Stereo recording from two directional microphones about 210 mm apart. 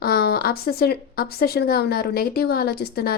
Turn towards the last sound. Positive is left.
turn(degrees=50)  # may be behind; listen again after turning